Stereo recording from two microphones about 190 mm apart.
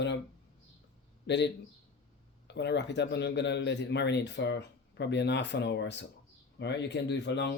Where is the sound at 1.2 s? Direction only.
65° left (ahead or behind).